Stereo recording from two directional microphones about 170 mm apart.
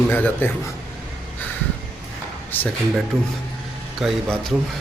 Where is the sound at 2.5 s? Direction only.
10° left (ahead or behind).